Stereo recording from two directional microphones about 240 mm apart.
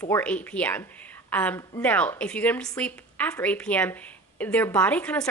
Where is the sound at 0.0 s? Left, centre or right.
Centre.